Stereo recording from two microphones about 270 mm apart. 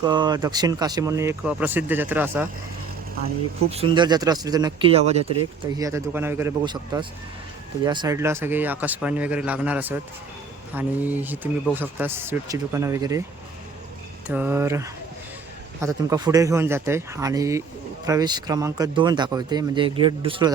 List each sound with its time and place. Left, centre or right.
0.0 s speech: centre
3.7 s speech: centre
5.7 s speech: centre
14.3 s speech: centre